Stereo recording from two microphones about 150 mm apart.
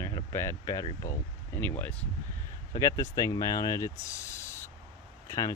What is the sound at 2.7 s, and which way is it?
Speech, 20° left (ahead or behind).